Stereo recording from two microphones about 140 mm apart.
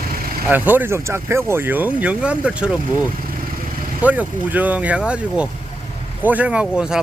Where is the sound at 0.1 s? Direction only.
90° right.